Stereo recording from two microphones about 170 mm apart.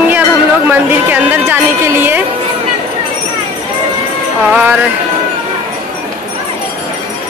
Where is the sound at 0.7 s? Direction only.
10° right (ahead or behind).